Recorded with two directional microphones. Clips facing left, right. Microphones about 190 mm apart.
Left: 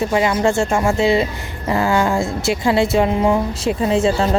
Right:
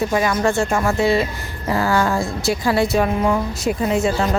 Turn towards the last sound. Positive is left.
turn(degrees=30)  # may be behind; listen again after turning